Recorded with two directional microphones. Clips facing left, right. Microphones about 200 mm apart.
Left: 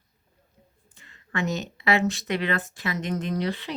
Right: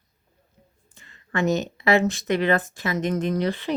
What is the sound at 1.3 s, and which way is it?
Speech, 50° right (ahead or behind).